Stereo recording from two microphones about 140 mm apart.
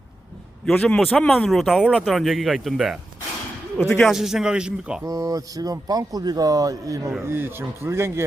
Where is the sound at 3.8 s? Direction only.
15° left (ahead or behind).